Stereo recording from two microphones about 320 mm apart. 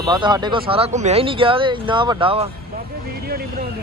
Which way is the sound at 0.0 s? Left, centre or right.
Centre.